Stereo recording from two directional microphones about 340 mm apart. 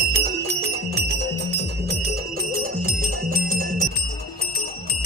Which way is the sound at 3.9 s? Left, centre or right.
Left.